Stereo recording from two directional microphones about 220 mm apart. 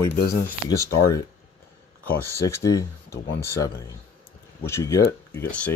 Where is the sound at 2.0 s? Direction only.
10° left (ahead or behind).